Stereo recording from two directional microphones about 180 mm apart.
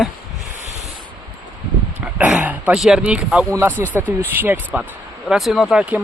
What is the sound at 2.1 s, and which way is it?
Speech, 10° right (ahead or behind).